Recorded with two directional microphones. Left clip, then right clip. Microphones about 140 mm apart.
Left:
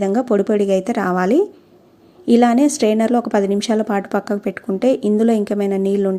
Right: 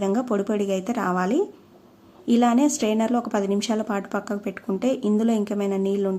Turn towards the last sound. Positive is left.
turn(degrees=35)  # may be behind; listen again after turning